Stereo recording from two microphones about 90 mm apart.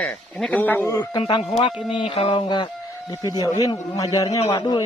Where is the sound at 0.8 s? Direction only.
30° left (ahead or behind).